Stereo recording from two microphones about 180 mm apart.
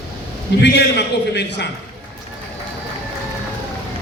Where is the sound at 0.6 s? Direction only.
70° left (ahead or behind).